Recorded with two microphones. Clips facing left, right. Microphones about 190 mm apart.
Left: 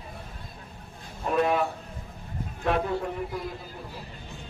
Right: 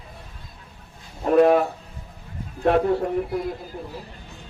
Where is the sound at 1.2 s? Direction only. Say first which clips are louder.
Right 8 dB; 50° right (ahead or behind).